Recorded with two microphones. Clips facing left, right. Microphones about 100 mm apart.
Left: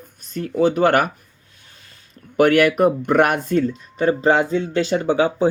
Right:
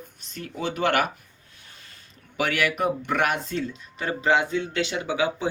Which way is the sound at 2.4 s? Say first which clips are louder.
Left 10 dB; 50° left (ahead or behind).